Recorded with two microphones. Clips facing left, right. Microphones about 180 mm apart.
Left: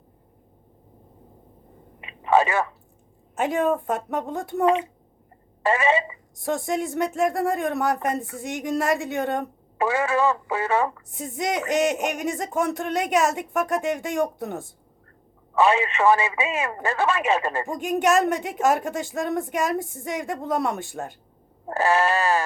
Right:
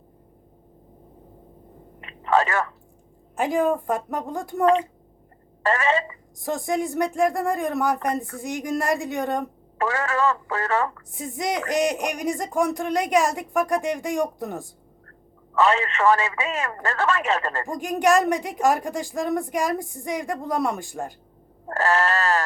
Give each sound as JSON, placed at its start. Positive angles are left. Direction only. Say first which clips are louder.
{"t": 2.0, "sound": "a sound", "louder": "left 2 dB", "side_deg": 15}
{"t": 3.3, "sound": "speech", "louder": "right 1 dB", "side_deg": 0}
{"t": 4.6, "sound": "speech", "louder": "right 2 dB", "side_deg": 20}
{"t": 6.4, "sound": "speech", "louder": "even", "side_deg": 0}
{"t": 9.7, "sound": "speech", "louder": "left 2 dB", "side_deg": 15}
{"t": 11.1, "sound": "speech", "louder": "even", "side_deg": 0}
{"t": 15.5, "sound": "speech", "louder": "left 1 dB", "side_deg": 15}
{"t": 17.7, "sound": "speech", "louder": "right 2 dB", "side_deg": 0}
{"t": 21.7, "sound": "speech", "louder": "left 1 dB", "side_deg": 15}